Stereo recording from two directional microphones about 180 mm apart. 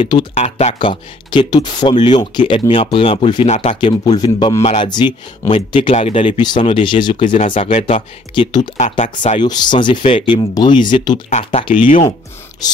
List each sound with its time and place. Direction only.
0.0 s speech: 25° left (ahead or behind)
0.3 s speech: 40° left (ahead or behind)
4.0 s speech: 20° left (ahead or behind)
5.9 s speech: 40° left (ahead or behind)
8.7 s speech: 45° left (ahead or behind)
9.4 s speech: 25° left (ahead or behind)
11.2 s speech: 40° left (ahead or behind)
11.6 s speech: 30° left (ahead or behind)